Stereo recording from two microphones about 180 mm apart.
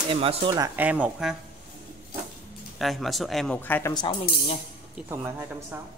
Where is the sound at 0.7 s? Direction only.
10° right (ahead or behind).